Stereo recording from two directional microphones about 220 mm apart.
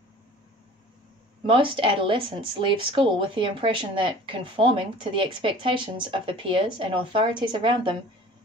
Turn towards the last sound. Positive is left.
turn(degrees=-20)  # may be behind; listen again after turning